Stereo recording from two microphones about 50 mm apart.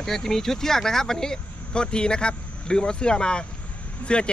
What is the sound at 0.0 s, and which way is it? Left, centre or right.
Speech, centre.